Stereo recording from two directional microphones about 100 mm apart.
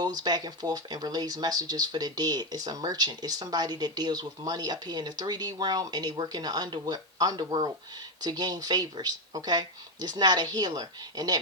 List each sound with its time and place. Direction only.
0.0 s speech: 40° right (ahead or behind)